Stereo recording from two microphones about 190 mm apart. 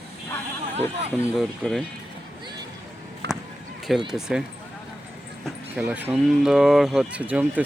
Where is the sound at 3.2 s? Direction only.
60° right (ahead or behind).